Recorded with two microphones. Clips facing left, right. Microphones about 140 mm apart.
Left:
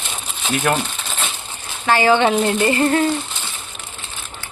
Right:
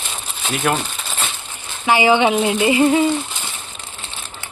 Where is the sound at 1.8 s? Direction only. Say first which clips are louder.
Even; 15° right (ahead or behind).